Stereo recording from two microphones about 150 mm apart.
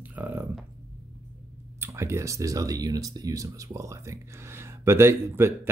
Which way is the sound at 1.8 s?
20° right (ahead or behind).